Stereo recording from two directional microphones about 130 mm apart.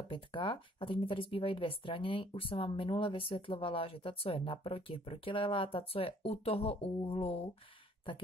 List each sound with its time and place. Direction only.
0.1 s speech: 40° left (ahead or behind)